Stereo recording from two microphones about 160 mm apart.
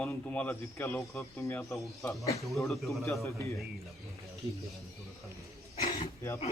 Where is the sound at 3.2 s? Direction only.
20° left (ahead or behind).